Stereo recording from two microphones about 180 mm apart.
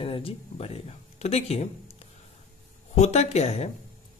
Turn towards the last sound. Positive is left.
turn(degrees=35)  # may be behind; listen again after turning